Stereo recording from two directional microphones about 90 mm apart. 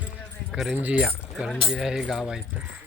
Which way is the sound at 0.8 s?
15° right (ahead or behind).